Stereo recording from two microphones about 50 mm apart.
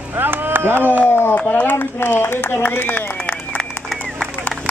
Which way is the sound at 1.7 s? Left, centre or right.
Left.